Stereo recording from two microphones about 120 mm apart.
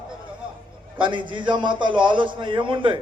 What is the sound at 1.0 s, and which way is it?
A man's voice, 45° right (ahead or behind).